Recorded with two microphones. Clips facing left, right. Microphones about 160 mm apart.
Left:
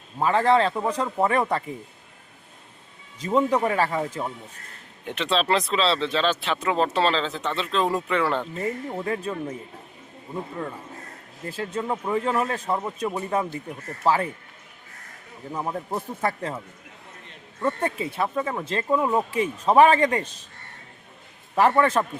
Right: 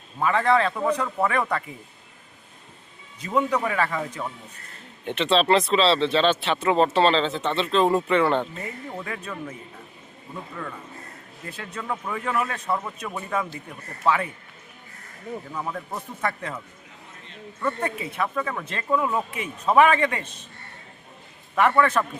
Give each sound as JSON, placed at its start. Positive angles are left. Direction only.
{"t": 0.2, "sound": "speech", "side_deg": 30}
{"t": 3.2, "sound": "speech", "side_deg": 30}
{"t": 5.0, "sound": "speech", "side_deg": 0}
{"t": 8.9, "sound": "speech", "side_deg": 25}
{"t": 15.5, "sound": "speech", "side_deg": 25}
{"t": 17.8, "sound": "speech", "side_deg": 30}
{"t": 21.5, "sound": "speech", "side_deg": 30}